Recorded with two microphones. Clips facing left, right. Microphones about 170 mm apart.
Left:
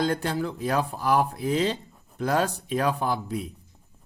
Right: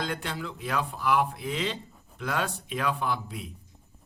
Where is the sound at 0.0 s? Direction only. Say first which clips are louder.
Left 7 dB; 40° left (ahead or behind).